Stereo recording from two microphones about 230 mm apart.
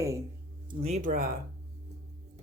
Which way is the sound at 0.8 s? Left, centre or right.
Right.